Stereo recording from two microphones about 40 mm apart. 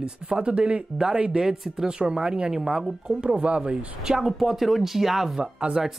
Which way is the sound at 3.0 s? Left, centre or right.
Right.